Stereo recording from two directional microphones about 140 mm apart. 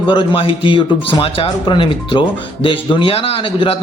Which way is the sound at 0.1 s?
35° left (ahead or behind).